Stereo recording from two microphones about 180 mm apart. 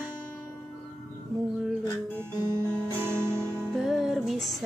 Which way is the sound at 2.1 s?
15° right (ahead or behind).